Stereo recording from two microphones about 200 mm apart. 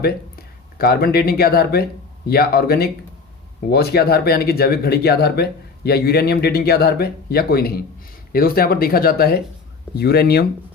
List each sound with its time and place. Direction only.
0.8 s speech: 50° left (ahead or behind)